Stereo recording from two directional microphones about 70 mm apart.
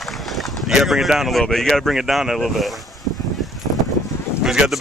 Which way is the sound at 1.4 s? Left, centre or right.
Centre.